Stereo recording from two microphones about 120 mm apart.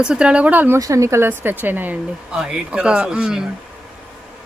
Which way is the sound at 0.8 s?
25° right (ahead or behind).